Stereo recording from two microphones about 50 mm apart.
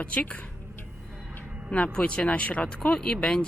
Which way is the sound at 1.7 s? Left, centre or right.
Left.